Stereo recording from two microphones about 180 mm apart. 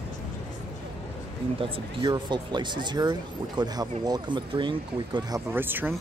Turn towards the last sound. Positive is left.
turn(degrees=-10)  # may be behind; listen again after turning